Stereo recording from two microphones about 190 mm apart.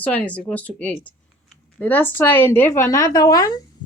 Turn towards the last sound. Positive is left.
turn(degrees=20)  # may be behind; listen again after turning